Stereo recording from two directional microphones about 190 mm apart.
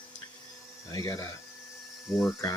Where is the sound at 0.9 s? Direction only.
20° left (ahead or behind).